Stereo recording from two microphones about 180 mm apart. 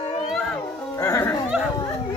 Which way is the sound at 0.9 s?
15° left (ahead or behind).